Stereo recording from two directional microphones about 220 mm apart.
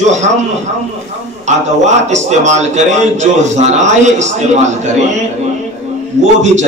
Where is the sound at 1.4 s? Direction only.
30° right (ahead or behind).